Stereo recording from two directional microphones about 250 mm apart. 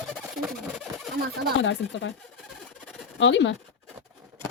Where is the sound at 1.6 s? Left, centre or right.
Left.